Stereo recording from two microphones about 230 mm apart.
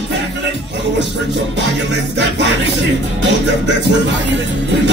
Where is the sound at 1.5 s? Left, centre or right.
Right.